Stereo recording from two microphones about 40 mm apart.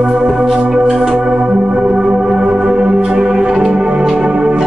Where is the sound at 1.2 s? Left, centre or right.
Centre.